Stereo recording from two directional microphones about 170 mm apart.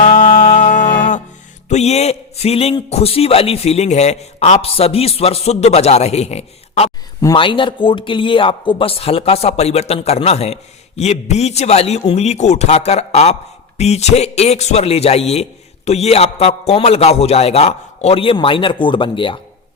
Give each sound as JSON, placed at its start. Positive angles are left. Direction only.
{"t": 0.0, "sound": "music", "side_deg": 45}
{"t": 1.7, "sound": "a man's voice", "side_deg": 40}
{"t": 7.2, "sound": "a man's voice", "side_deg": 25}